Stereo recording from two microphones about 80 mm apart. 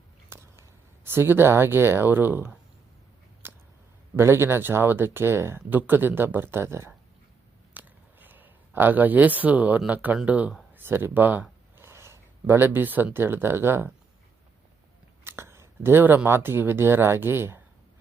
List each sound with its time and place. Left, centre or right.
0.3 s speech: right
3.4 s a sound: right
4.2 s speech: right
7.7 s a sound: right
10.2 s speech: centre
10.8 s speech: right
15.2 s speech: right